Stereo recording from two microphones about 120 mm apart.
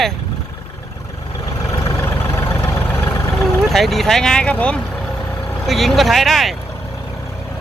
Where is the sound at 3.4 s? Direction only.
Centre (ahead or behind).